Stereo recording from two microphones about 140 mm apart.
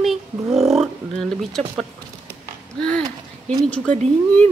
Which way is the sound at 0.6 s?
Centre (ahead or behind).